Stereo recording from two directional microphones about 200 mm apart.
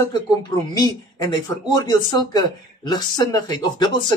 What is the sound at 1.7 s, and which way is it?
Speech, 20° left (ahead or behind).